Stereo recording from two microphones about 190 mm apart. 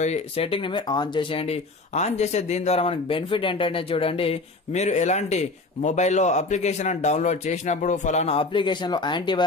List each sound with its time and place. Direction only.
0.0 s speech: 30° left (ahead or behind)